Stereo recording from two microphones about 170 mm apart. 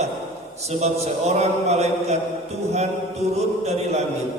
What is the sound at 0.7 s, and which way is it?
A man's voice, 40° right (ahead or behind).